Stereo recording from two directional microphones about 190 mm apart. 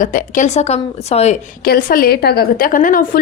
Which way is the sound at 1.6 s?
50° left (ahead or behind).